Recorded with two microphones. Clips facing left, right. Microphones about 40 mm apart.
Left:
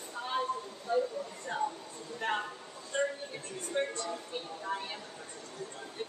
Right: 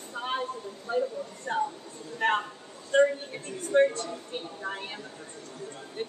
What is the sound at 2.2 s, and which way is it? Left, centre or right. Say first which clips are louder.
Speech: right 8 dB; right.